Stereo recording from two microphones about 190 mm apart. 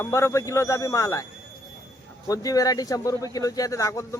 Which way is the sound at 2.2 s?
20° left (ahead or behind).